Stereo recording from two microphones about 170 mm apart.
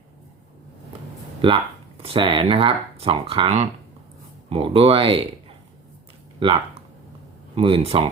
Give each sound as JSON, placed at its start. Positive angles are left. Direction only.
{"t": 1.4, "sound": "speech", "side_deg": -35}
{"t": 6.4, "sound": "speech", "side_deg": -35}